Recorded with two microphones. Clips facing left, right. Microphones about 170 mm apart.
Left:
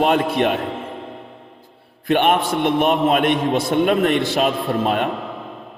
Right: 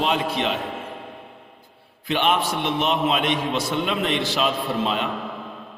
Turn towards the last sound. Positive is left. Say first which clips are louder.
# left 5 dB
turn(degrees=50)  # may be behind; listen again after turning